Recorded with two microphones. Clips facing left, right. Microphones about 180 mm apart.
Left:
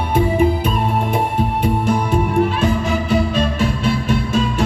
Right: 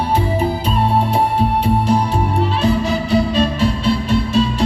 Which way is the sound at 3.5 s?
50° left (ahead or behind).